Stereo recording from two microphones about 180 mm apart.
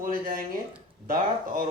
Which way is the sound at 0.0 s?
50° right (ahead or behind).